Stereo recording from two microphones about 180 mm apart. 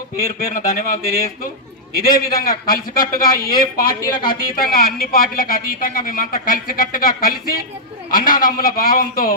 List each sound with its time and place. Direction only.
0.5 s speech: 50° left (ahead or behind)